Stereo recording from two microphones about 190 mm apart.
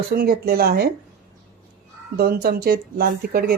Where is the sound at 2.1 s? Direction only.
55° right (ahead or behind).